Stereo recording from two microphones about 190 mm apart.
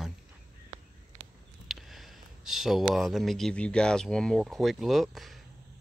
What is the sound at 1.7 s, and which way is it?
Speech, centre (ahead or behind).